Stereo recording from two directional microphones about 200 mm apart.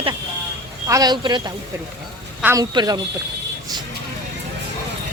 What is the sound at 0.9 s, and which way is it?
Speech, 20° right (ahead or behind).